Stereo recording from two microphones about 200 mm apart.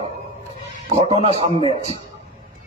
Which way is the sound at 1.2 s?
30° right (ahead or behind).